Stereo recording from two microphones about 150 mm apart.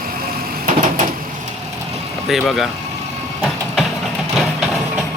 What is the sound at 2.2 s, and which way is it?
Speech, centre (ahead or behind).